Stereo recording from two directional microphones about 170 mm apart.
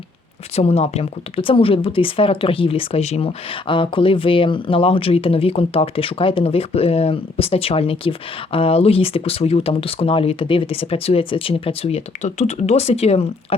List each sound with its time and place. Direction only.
0.5 s speech: 40° left (ahead or behind)